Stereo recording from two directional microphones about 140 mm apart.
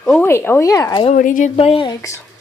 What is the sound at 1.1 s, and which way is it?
Speech, 70° left (ahead or behind).